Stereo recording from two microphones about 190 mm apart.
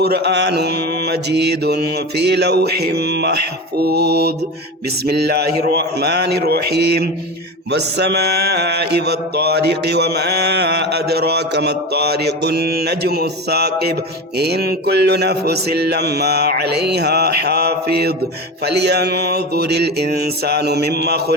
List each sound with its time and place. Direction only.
0.0 s mantra: 55° right (ahead or behind)